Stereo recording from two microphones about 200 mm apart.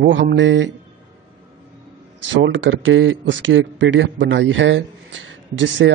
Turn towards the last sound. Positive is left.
turn(degrees=-65)  # may be behind; listen again after turning